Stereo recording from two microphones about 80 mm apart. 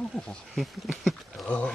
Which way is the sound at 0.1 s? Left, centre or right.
Centre.